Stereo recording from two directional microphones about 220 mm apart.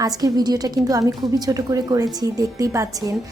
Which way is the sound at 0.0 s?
15° right (ahead or behind).